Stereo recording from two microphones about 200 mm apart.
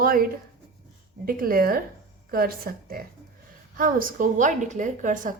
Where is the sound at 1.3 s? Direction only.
45° right (ahead or behind).